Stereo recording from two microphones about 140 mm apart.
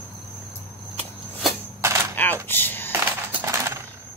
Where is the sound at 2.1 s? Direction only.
15° left (ahead or behind).